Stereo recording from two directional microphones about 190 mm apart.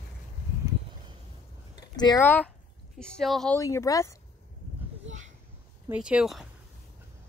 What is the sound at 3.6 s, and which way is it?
Speech, 15° left (ahead or behind).